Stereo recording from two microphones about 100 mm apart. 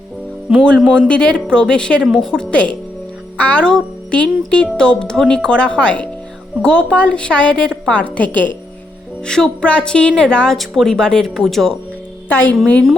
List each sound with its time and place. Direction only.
0.8 s speech: 10° left (ahead or behind)
12.3 s speech: 20° left (ahead or behind)